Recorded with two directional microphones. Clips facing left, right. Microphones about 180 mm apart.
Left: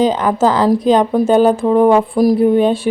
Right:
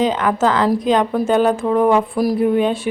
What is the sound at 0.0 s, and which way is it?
A woman's voice, 35° left (ahead or behind).